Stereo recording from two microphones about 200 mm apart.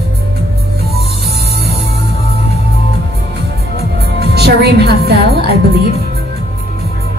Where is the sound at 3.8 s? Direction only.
55° right (ahead or behind).